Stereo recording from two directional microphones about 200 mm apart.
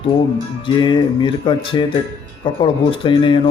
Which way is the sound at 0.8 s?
20° left (ahead or behind).